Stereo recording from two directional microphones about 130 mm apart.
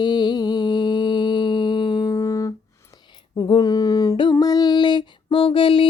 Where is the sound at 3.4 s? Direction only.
30° left (ahead or behind).